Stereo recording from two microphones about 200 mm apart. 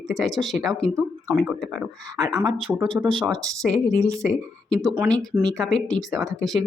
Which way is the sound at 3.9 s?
15° right (ahead or behind).